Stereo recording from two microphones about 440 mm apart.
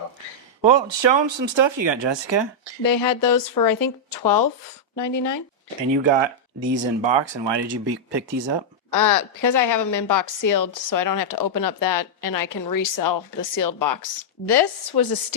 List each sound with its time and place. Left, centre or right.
0.6 s speech: right
2.8 s a woman's voice: left
6.0 s speech: right
9.0 s a woman's voice: left
14.4 s a woman's voice: left